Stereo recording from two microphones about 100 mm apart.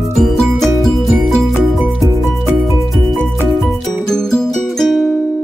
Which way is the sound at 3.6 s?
5° left (ahead or behind).